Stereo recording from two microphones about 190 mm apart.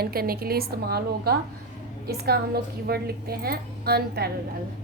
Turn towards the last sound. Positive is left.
turn(degrees=-55)  # may be behind; listen again after turning